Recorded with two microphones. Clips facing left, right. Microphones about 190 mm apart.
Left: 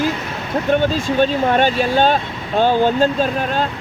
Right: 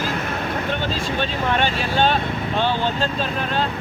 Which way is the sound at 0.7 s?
45° left (ahead or behind).